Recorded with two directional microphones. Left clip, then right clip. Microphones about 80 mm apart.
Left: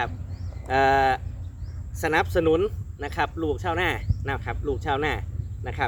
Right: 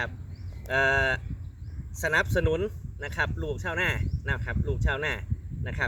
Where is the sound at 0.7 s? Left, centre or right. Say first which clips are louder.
Left 4 dB; left.